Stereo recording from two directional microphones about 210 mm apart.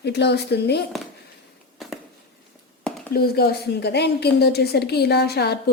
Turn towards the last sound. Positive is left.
turn(degrees=50)  # may be behind; listen again after turning